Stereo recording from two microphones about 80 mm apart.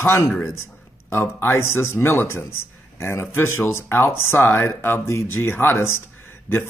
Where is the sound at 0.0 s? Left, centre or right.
Left.